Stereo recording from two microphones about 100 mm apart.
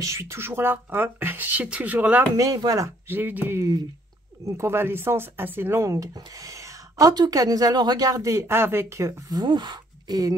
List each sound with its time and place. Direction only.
0.0 s speech: 30° right (ahead or behind)
2.3 s speech: 35° right (ahead or behind)
3.1 s speech: 20° right (ahead or behind)
5.9 s speech: 35° right (ahead or behind)
9.4 s speech: 50° right (ahead or behind)